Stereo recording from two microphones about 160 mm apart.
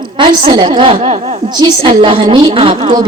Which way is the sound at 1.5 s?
25° right (ahead or behind).